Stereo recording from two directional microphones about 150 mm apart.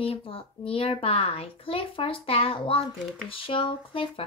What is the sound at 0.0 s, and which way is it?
Speech, 40° left (ahead or behind).